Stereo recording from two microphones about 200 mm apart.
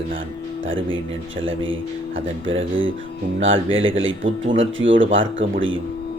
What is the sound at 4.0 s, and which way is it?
Speech, 70° right (ahead or behind).